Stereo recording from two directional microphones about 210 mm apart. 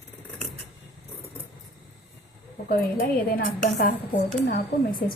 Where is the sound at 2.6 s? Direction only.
45° left (ahead or behind).